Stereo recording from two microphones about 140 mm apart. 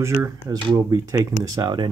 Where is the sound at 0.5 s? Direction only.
30° right (ahead or behind).